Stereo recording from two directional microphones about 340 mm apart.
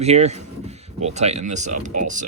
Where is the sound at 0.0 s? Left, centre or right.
Centre.